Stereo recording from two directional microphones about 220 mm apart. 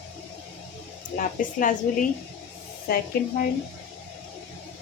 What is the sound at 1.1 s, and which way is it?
Speech, 35° left (ahead or behind).